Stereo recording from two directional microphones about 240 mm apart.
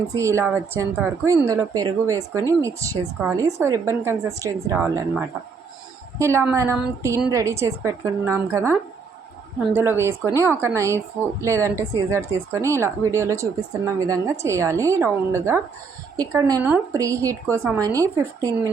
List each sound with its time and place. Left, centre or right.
0.1 s a woman's voice: centre